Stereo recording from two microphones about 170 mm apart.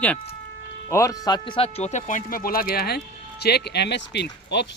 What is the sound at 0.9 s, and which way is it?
Speech, 20° left (ahead or behind).